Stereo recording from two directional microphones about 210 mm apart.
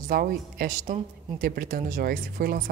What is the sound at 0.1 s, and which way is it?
A woman's voice, 45° right (ahead or behind).